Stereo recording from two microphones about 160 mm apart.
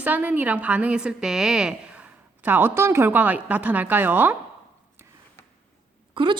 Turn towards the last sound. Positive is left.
turn(degrees=-30)  # may be behind; listen again after turning